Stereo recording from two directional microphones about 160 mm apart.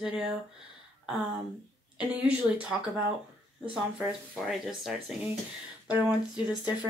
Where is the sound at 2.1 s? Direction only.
5° right (ahead or behind).